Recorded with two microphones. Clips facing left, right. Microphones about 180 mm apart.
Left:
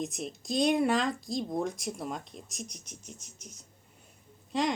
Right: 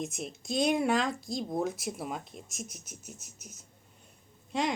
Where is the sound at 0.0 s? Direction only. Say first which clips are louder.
Left 1 dB; centre (ahead or behind).